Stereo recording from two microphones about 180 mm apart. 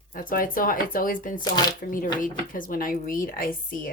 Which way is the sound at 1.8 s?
50° left (ahead or behind).